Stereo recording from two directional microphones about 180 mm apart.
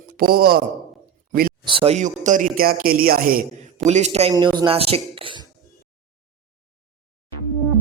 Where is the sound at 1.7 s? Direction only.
30° right (ahead or behind).